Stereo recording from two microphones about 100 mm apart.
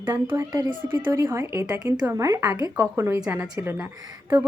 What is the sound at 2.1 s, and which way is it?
A woman's voice, 30° right (ahead or behind).